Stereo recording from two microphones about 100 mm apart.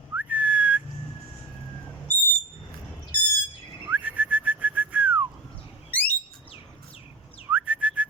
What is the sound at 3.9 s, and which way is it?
Whistling, 15° right (ahead or behind).